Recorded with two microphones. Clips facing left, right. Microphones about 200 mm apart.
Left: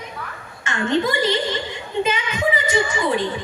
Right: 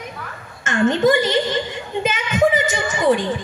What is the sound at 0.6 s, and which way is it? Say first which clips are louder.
Singing: right 5 dB; 45° right (ahead or behind).